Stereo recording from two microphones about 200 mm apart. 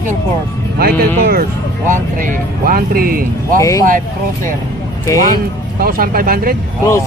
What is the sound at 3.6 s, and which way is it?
Speech, 15° left (ahead or behind).